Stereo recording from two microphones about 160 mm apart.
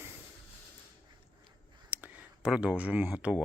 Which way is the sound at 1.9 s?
5° right (ahead or behind).